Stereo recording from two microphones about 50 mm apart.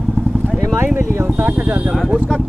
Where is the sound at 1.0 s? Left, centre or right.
Right.